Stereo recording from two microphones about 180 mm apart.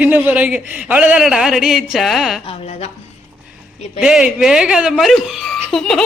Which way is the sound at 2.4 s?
35° left (ahead or behind).